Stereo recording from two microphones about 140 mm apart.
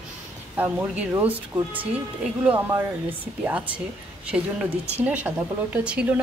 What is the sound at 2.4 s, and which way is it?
A woman's voice, 15° right (ahead or behind).